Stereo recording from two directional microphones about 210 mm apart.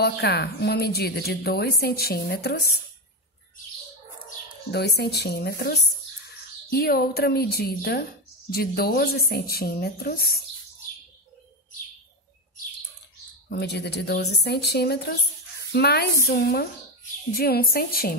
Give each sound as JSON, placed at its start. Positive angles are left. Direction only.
{"t": 0.0, "sound": "speech", "side_deg": 50}
{"t": 4.6, "sound": "speech", "side_deg": 50}
{"t": 13.5, "sound": "speech", "side_deg": 50}